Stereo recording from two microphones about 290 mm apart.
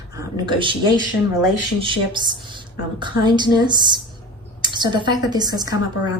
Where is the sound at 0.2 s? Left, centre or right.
Centre.